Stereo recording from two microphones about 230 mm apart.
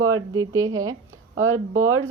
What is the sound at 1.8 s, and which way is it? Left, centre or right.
Speech, right.